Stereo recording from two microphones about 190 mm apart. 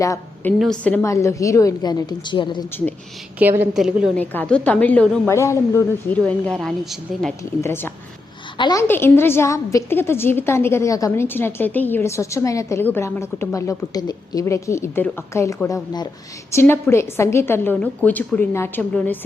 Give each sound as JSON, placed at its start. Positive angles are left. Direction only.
{"t": 0.0, "sound": "a woman's voice", "side_deg": 15}
{"t": 0.6, "sound": "a woman's voice", "side_deg": 5}
{"t": 1.0, "sound": "a woman's voice", "side_deg": 15}
{"t": 3.6, "sound": "a woman's voice", "side_deg": -5}
{"t": 4.2, "sound": "a woman's voice", "side_deg": 10}
{"t": 8.5, "sound": "a woman's voice", "side_deg": 25}
{"t": 8.9, "sound": "a woman's voice", "side_deg": 10}